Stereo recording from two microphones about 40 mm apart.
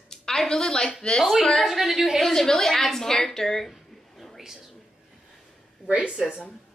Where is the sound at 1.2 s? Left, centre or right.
Centre.